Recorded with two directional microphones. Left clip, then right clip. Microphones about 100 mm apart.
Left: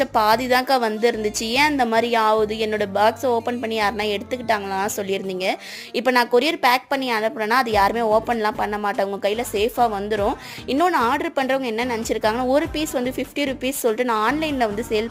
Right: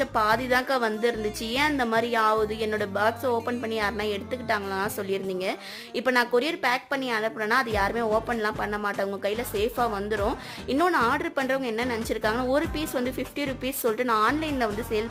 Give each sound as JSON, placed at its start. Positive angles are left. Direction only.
{"t": 0.0, "sound": "a woman's voice", "side_deg": 30}